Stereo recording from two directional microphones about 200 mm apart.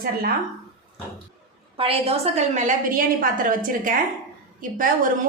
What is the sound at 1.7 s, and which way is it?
A woman's voice, 25° right (ahead or behind).